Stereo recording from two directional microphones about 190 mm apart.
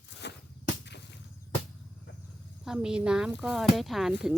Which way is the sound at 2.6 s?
5° right (ahead or behind).